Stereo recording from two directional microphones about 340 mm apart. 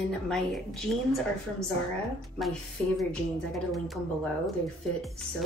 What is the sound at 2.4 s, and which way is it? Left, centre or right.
Speech, centre.